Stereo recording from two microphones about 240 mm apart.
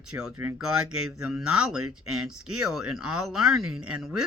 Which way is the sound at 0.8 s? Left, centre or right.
Right.